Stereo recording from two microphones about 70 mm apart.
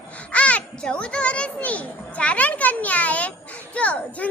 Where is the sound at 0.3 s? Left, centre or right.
Centre.